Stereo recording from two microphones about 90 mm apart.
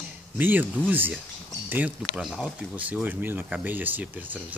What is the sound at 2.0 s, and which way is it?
Speech, centre (ahead or behind).